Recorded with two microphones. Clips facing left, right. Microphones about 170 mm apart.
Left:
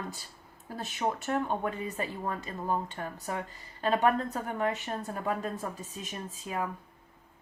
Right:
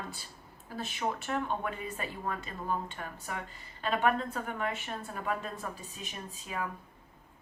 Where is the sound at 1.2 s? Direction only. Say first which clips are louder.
Left 3 dB; 40° left (ahead or behind).